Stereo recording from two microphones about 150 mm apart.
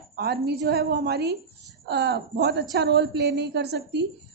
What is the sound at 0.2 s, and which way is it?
A woman's voice, 90° right.